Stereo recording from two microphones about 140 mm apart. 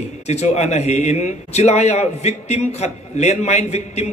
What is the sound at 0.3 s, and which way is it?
A man's voice, 50° left (ahead or behind).